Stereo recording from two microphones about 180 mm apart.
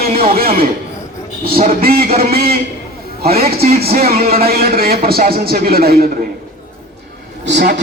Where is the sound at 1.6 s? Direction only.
55° right (ahead or behind).